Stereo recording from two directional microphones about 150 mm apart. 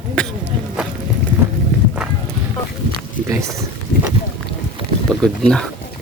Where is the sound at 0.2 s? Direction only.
5° left (ahead or behind).